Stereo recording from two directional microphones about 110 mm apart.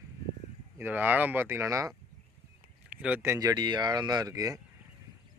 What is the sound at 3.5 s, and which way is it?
Speech, 40° right (ahead or behind).